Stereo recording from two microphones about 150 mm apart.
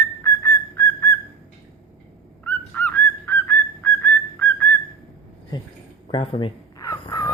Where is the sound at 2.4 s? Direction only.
10° left (ahead or behind).